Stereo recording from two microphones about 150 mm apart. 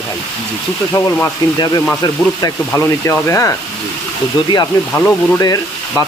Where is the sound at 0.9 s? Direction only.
20° left (ahead or behind).